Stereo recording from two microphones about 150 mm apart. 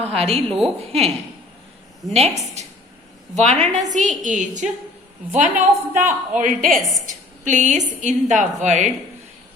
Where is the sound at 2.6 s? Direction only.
50° right (ahead or behind).